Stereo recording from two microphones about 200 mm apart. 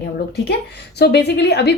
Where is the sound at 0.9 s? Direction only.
55° left (ahead or behind).